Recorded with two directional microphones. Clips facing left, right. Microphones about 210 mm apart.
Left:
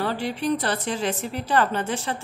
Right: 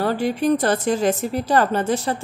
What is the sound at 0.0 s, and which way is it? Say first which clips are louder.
Speech: right 6 dB; 45° right (ahead or behind).